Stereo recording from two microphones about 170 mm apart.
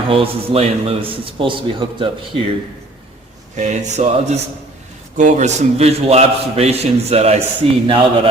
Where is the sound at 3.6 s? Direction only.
45° right (ahead or behind).